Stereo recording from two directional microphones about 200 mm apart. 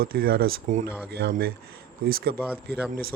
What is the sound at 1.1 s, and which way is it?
Speech, 55° right (ahead or behind).